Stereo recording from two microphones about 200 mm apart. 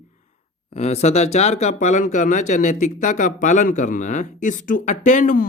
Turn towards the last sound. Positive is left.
turn(degrees=40)  # may be behind; listen again after turning